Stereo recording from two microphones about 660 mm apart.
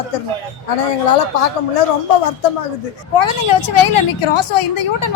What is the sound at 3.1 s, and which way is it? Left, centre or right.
A woman's voice, left.